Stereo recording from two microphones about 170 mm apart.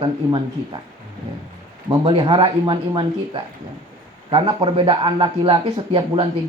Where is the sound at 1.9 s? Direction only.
25° right (ahead or behind).